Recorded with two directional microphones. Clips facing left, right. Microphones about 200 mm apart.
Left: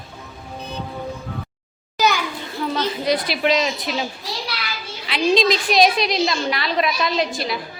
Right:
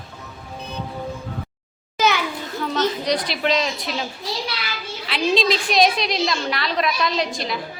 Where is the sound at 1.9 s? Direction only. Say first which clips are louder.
Even; centre (ahead or behind).